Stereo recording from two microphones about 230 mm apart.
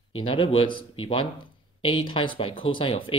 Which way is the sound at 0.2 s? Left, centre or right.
Left.